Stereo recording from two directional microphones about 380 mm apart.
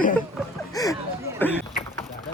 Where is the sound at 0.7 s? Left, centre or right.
Centre.